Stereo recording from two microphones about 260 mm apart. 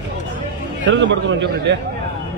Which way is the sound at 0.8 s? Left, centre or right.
Right.